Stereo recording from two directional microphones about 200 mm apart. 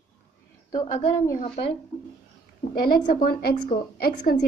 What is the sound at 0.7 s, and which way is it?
Speech, 25° left (ahead or behind).